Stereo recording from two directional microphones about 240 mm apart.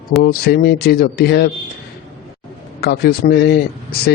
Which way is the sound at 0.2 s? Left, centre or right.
Left.